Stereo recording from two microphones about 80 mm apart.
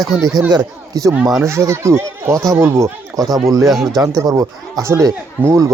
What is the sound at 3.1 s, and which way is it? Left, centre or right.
Speech, right.